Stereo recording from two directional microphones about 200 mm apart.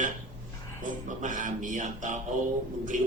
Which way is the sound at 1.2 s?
40° right (ahead or behind).